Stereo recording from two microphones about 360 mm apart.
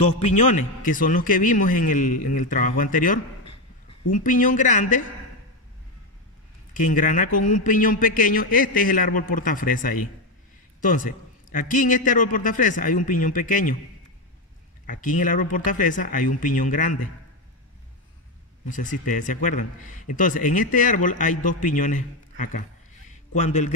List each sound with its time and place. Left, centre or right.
0.3 s speech: left
6.7 s speech: left
14.9 s speech: left
18.7 s speech: left